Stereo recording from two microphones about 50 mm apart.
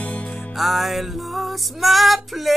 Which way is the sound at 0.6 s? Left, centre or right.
Centre.